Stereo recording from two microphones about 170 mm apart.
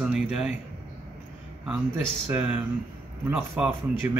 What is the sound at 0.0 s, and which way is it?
Speech, 5° right (ahead or behind).